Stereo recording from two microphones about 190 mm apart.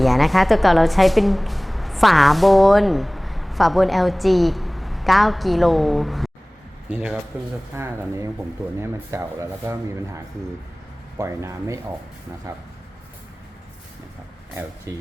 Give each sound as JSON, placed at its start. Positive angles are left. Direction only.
{"t": 0.0, "sound": "a woman's voice", "side_deg": 0}
{"t": 11.2, "sound": "speech", "side_deg": -15}
{"t": 14.9, "sound": "speech", "side_deg": -15}